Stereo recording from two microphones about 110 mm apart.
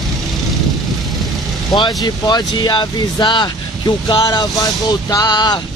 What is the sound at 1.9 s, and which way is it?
Speech, 35° left (ahead or behind).